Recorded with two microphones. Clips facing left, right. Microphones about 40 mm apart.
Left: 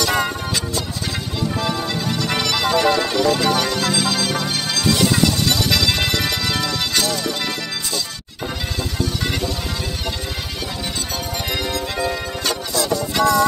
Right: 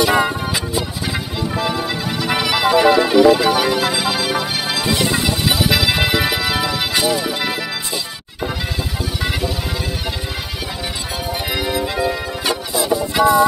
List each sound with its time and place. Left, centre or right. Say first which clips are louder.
0.0 s music: right 4 dB; centre
9.0 s music: even; centre
11.5 s music: right 4 dB; centre